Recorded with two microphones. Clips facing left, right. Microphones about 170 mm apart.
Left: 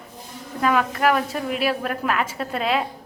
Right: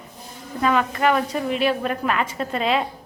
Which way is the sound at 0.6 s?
5° left (ahead or behind).